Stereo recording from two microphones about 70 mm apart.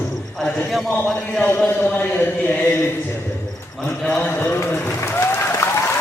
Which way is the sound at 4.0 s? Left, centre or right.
Centre.